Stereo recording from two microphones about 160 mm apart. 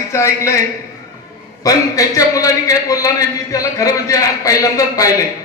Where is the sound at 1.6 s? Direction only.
20° left (ahead or behind).